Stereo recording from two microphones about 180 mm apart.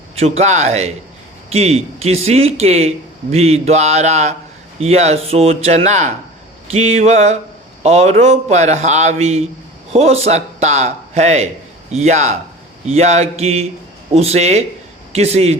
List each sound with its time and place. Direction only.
0.2 s a man's voice: 35° right (ahead or behind)